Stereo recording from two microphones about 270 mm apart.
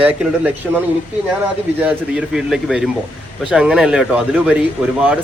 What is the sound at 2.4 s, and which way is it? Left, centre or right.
Speech, centre.